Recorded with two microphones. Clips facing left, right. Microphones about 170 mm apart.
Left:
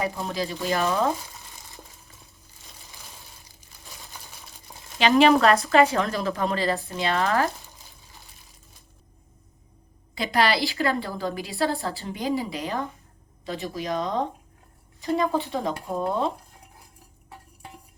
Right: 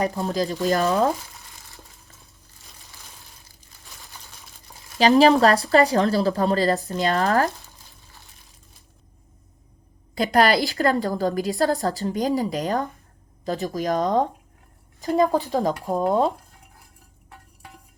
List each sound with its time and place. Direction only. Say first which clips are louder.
0.3 s a woman's voice: right 5 dB; 40° right (ahead or behind)
4.9 s a woman's voice: right 3 dB; 40° right (ahead or behind)
10.2 s a woman's voice: right 4 dB; 45° right (ahead or behind)
17.2 s a sound: left 2 dB; 15° left (ahead or behind)